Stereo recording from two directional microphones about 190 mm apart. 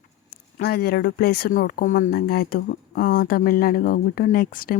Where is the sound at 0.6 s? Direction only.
55° left (ahead or behind).